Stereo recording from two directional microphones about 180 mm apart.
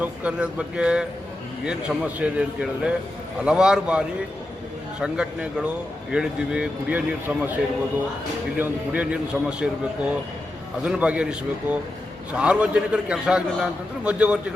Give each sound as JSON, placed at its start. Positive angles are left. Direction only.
{"t": 0.0, "sound": "a man's voice", "side_deg": -5}
{"t": 8.5, "sound": "a man's voice", "side_deg": -10}